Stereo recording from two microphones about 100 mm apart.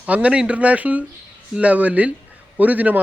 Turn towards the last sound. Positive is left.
turn(degrees=-15)  # may be behind; listen again after turning